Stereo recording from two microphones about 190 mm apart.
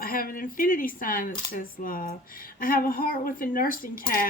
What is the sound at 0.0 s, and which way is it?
Speech, 50° left (ahead or behind).